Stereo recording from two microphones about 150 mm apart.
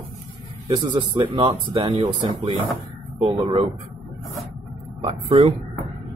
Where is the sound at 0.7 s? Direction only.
35° right (ahead or behind).